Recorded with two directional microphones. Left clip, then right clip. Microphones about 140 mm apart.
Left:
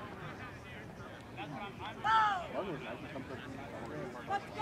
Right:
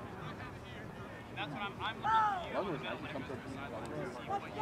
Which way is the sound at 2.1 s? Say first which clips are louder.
Left 2 dB; 20° left (ahead or behind).